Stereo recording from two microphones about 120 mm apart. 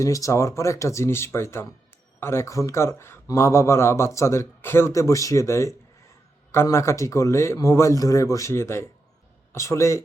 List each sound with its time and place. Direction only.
0.0 s speech: 25° left (ahead or behind)